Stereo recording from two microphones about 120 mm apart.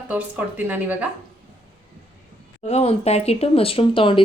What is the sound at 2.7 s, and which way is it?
Speech, 60° left (ahead or behind).